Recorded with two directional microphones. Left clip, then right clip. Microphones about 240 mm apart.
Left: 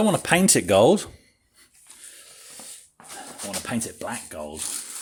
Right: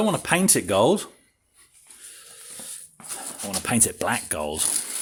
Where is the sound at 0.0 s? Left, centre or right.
Centre.